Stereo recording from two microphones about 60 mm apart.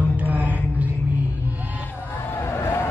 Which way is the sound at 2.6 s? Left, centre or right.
Left.